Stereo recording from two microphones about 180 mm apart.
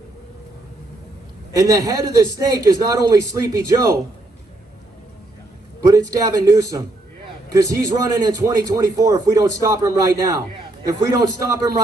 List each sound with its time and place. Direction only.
1.5 s a man's voice: 20° right (ahead or behind)
5.8 s a man's voice: 20° right (ahead or behind)